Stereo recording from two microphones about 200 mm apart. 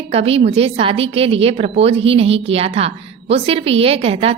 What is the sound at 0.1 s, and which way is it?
A woman's voice, 30° right (ahead or behind).